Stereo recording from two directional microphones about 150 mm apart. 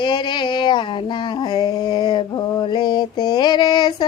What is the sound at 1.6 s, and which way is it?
Child singing, 30° left (ahead or behind).